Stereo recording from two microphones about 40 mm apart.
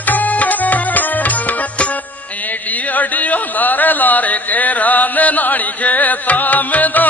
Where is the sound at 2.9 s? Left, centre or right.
Left.